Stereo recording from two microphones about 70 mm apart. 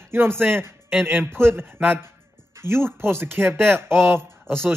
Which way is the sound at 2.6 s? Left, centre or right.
Right.